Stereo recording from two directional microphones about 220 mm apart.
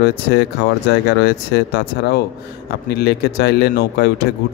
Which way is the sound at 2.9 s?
45° left (ahead or behind).